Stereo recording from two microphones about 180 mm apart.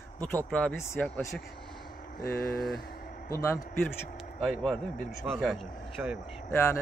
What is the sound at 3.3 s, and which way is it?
Speech, 15° left (ahead or behind).